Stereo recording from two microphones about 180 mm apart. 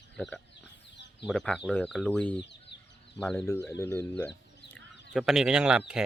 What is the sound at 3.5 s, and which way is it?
Speech, 15° left (ahead or behind).